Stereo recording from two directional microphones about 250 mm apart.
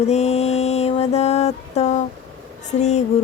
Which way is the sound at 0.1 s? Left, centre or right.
Left.